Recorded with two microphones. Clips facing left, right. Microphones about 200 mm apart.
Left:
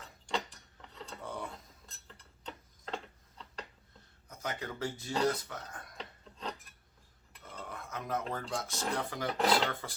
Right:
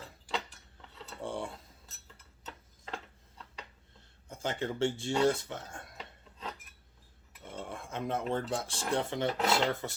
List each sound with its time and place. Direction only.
0.3 s a sound: centre (ahead or behind)
1.2 s cutlery: 30° right (ahead or behind)
1.9 s tick-tock: 5° right (ahead or behind)
4.3 s speech: 30° right (ahead or behind)
7.4 s cutlery: 25° right (ahead or behind)
8.3 s speech: 30° right (ahead or behind)